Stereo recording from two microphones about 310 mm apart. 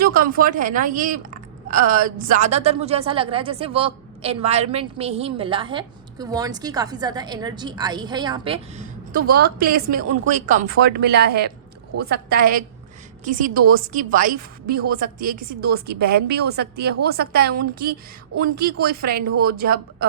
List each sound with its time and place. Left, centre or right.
0.0 s a woman's voice: right